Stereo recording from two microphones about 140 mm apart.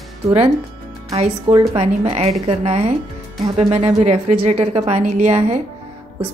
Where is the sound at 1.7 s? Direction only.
45° right (ahead or behind).